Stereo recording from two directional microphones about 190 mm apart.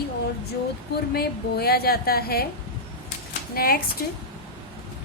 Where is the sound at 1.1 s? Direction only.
55° left (ahead or behind).